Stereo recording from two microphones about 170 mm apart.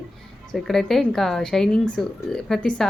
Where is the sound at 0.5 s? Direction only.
Centre (ahead or behind).